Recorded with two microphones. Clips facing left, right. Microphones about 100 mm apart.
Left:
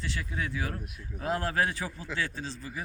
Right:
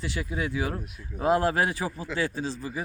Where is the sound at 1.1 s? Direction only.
40° right (ahead or behind).